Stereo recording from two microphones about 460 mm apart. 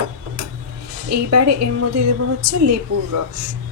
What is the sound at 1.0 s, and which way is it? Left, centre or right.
Speech, right.